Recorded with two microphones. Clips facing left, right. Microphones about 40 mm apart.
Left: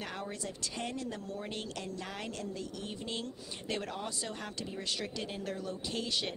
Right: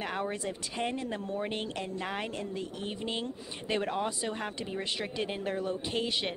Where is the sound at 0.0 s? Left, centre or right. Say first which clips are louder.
Right 6 dB; right.